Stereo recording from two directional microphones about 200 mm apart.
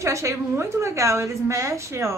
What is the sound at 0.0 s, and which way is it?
A woman's voice, 15° right (ahead or behind).